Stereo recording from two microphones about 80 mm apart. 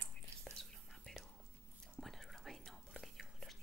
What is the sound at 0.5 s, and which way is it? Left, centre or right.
Whispering, centre.